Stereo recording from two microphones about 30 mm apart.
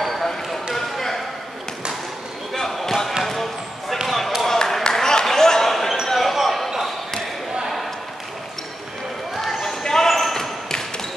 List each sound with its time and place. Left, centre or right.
0.0 s basketball bounce: centre
2.5 s basketball bounce: centre
4.2 s basketball bounce: centre
4.5 s a sound: centre
5.7 s basketball bounce: centre
9.4 s basketball bounce: centre
10.3 s basketball bounce: centre